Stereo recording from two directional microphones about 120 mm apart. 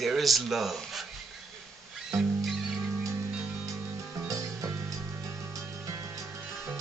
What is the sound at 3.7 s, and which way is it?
Music, 25° right (ahead or behind).